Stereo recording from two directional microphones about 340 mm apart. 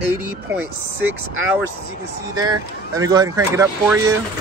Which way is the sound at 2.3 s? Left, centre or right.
Centre.